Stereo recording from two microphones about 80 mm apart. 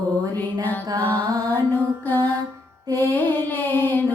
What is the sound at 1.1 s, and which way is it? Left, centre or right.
Music, right.